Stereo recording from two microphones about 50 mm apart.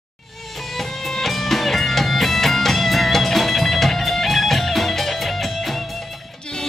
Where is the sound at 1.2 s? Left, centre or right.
Centre.